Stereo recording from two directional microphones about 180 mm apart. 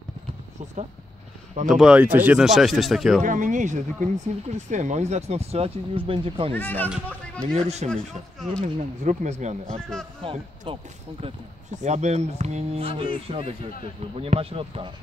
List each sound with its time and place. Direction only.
1.7 s speech: 5° right (ahead or behind)
3.2 s speech: 45° right (ahead or behind); by 6.5 s 30° right (ahead or behind)
6.5 s speech: 10° left (ahead or behind)
7.5 s speech: 35° right (ahead or behind)
9.0 s speech: 40° right (ahead or behind)